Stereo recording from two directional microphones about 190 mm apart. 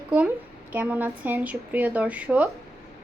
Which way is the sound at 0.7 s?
10° right (ahead or behind).